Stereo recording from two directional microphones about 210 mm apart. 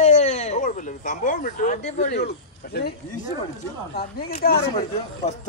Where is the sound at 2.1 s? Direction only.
50° left (ahead or behind).